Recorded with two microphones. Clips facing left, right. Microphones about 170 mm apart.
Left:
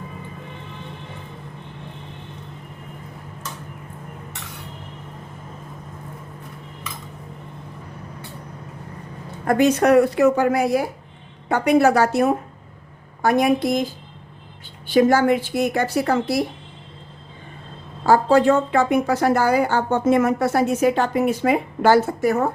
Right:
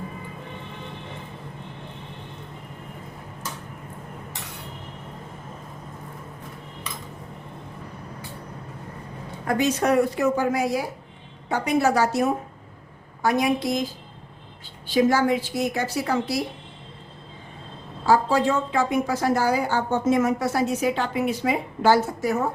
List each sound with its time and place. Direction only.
9.5 s a woman's voice: 60° left (ahead or behind)
14.8 s a woman's voice: 55° left (ahead or behind)
18.0 s a woman's voice: 55° left (ahead or behind)